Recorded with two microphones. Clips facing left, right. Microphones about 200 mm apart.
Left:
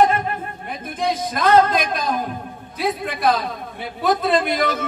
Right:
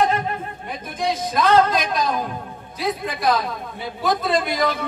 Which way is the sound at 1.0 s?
55° left (ahead or behind).